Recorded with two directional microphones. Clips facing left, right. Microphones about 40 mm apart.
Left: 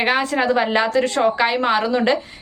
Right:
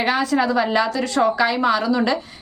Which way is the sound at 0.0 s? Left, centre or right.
Left.